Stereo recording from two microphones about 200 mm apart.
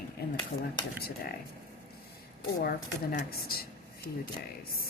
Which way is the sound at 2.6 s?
45° left (ahead or behind).